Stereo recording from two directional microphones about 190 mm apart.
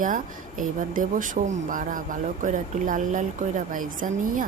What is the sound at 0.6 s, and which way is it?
Speech, 45° right (ahead or behind).